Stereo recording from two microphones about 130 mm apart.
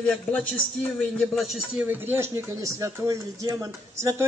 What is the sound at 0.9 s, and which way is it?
Speech, centre (ahead or behind).